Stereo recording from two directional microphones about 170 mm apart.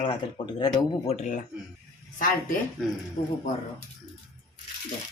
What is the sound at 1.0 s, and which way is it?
Speech, 45° left (ahead or behind).